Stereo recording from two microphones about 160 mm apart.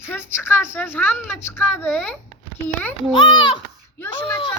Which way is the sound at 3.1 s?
30° left (ahead or behind).